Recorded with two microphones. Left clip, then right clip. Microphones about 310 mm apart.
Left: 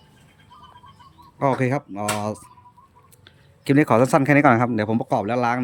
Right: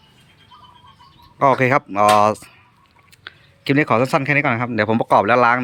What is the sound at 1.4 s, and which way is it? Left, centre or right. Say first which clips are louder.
Speech: right 7 dB; centre.